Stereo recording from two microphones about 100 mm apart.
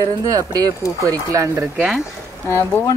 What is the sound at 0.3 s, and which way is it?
Speech, 40° right (ahead or behind).